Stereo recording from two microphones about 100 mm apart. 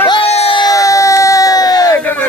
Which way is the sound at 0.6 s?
35° left (ahead or behind).